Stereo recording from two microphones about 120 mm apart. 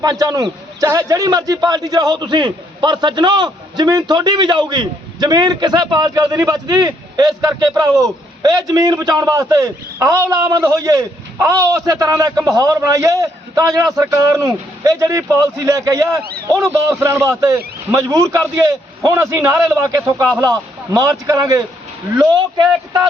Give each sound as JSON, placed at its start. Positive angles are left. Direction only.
{"t": 0.0, "sound": "a man's voice", "side_deg": -35}